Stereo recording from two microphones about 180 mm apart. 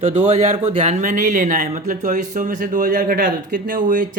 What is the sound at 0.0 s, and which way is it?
Speech, 40° right (ahead or behind).